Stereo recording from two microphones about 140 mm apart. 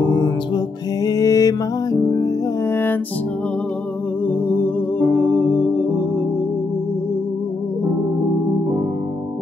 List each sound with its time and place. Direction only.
1.0 s music: 25° left (ahead or behind)
2.7 s music: 15° left (ahead or behind)
4.3 s music: 15° left (ahead or behind)